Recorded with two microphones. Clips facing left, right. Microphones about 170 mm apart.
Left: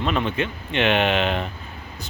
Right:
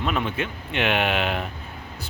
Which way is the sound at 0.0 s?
5° right (ahead or behind).